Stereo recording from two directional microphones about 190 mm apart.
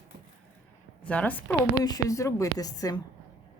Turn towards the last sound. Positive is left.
turn(degrees=20)  # may be behind; listen again after turning